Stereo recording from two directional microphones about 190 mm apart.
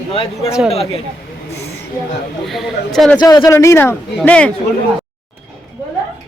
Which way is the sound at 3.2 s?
20° left (ahead or behind).